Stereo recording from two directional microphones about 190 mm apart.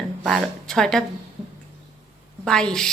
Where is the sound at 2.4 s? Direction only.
5° left (ahead or behind).